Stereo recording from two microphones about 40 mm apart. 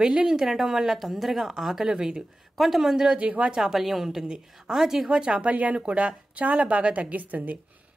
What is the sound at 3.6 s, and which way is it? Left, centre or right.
Speech, centre.